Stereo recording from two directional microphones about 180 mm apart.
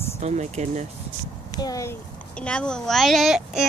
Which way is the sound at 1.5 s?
20° left (ahead or behind).